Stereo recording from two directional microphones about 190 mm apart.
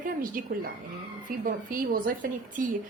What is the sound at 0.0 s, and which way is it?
A woman's voice, 45° right (ahead or behind).